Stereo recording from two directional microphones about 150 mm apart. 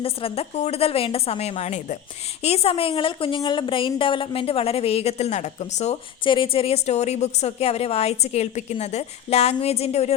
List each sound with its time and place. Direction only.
0.0 s a woman's voice: 40° left (ahead or behind)
6.2 s a woman's voice: 35° left (ahead or behind)